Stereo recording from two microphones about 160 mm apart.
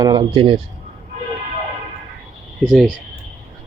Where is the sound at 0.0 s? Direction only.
25° right (ahead or behind).